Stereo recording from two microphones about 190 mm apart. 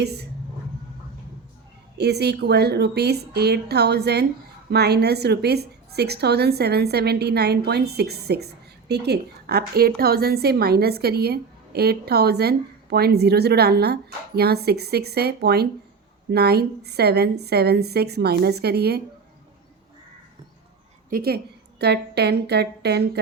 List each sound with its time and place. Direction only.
0.0 s speech: 60° right (ahead or behind)
2.0 s a woman's voice: 60° right (ahead or behind)
21.1 s a woman's voice: 55° right (ahead or behind)